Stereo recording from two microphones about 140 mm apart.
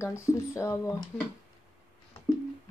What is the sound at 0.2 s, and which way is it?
Speech, 20° left (ahead or behind).